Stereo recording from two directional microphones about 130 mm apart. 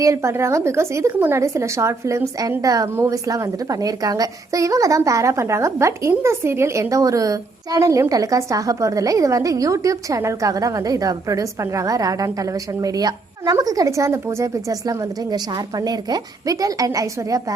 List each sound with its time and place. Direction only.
0.0 s speech: 25° right (ahead or behind)